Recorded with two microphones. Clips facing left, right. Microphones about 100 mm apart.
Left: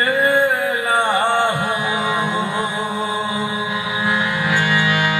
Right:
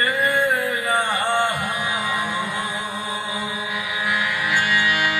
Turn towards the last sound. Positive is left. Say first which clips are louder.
# left 3 dB
turn(degrees=25)  # may be behind; listen again after turning